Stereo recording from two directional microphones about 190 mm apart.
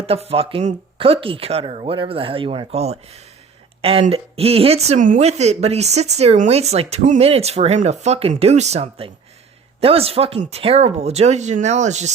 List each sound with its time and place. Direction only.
0.0 s speech: 30° right (ahead or behind)